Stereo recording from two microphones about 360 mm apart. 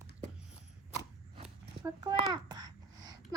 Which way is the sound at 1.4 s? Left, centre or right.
Centre.